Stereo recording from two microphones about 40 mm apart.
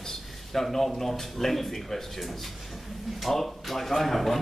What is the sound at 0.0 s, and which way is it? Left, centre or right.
Speech, centre.